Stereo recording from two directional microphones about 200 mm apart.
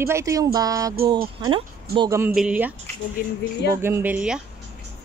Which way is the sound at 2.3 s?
5° right (ahead or behind).